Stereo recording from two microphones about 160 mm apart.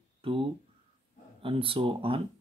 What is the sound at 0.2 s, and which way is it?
Speech, 35° right (ahead or behind).